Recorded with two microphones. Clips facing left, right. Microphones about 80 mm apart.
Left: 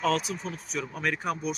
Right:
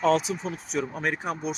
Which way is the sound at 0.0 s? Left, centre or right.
Right.